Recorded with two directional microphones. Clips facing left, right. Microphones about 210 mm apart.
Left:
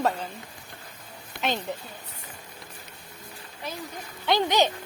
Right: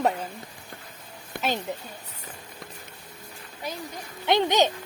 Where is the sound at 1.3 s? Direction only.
50° right (ahead or behind).